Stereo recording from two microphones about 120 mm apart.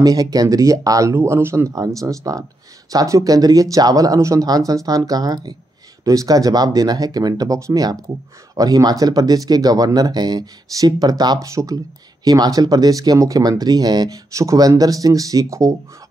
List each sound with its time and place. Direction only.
0.0 s speech: 30° right (ahead or behind)